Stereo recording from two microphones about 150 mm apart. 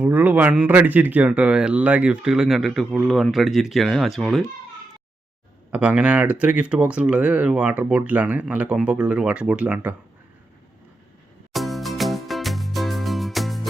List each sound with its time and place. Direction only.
0.0 s speech: 10° right (ahead or behind)
5.7 s speech: 10° right (ahead or behind)
11.5 s music: centre (ahead or behind)